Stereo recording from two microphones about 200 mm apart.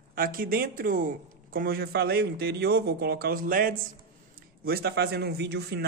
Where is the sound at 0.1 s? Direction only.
45° right (ahead or behind).